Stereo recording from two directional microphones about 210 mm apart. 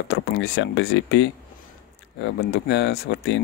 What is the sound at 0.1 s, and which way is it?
Speech, 55° left (ahead or behind).